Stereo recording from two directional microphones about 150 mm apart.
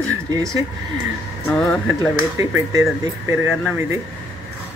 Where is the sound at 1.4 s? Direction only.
10° left (ahead or behind).